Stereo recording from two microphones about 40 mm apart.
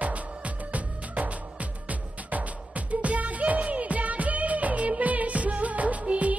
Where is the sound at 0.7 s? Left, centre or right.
Right.